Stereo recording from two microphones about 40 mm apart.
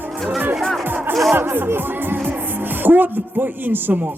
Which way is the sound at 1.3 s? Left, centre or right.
Right.